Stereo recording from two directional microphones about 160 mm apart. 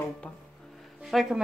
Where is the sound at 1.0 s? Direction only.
Centre (ahead or behind).